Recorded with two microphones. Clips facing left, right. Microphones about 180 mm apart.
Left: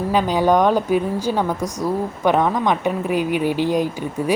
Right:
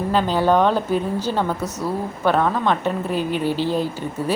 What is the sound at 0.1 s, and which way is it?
Speech, 10° left (ahead or behind).